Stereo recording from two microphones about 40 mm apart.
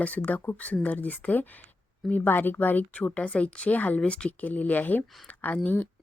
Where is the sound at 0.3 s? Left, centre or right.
Left.